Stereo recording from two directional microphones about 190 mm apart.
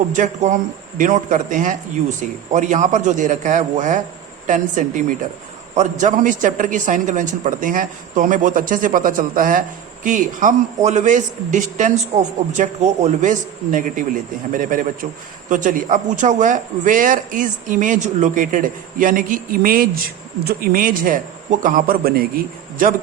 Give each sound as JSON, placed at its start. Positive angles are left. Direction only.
{"t": 0.1, "sound": "a man's voice", "side_deg": -40}